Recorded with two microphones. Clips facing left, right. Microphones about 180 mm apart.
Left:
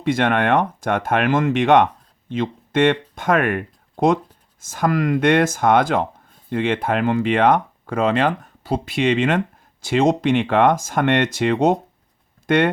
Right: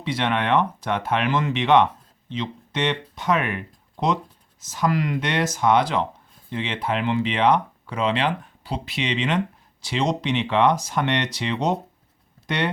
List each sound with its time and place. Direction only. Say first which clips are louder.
0.0 s speech: left 6 dB; 50° left (ahead or behind)